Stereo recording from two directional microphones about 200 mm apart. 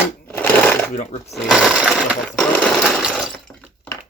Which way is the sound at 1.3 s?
Centre (ahead or behind).